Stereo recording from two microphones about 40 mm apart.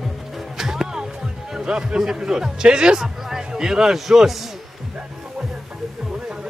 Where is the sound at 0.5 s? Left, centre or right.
Centre.